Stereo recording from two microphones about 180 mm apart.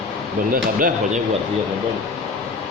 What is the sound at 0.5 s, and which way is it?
Speech, 50° right (ahead or behind).